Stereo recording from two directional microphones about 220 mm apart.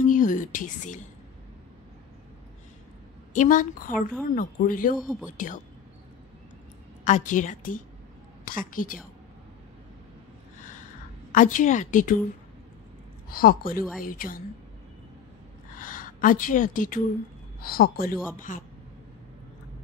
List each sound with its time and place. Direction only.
0.0 s whispering: 35° left (ahead or behind)
3.3 s a woman's voice: 35° left (ahead or behind)
4.9 s speech: centre (ahead or behind)
7.1 s a woman's voice: 35° left (ahead or behind)
11.3 s a woman's voice: 35° left (ahead or behind)
13.3 s a woman's voice: 40° left (ahead or behind)
15.8 s a woman's voice: 40° left (ahead or behind)